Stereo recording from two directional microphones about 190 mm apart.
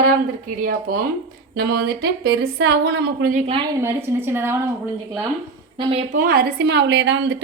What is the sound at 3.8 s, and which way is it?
A woman's voice, 15° right (ahead or behind).